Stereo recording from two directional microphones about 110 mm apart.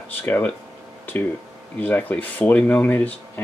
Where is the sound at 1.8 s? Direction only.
15° left (ahead or behind).